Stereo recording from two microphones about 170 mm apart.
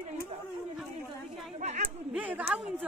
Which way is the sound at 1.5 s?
40° right (ahead or behind).